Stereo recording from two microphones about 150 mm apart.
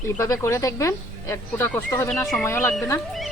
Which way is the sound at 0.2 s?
20° left (ahead or behind).